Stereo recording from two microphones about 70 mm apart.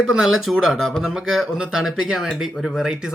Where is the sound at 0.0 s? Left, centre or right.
Centre.